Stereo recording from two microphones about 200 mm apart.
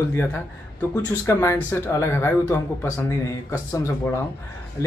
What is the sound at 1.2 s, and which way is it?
A man's voice, 15° left (ahead or behind).